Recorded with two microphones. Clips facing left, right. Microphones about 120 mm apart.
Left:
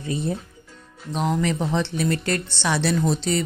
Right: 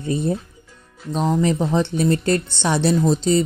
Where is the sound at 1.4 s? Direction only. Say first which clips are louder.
Right 4 dB; 35° right (ahead or behind).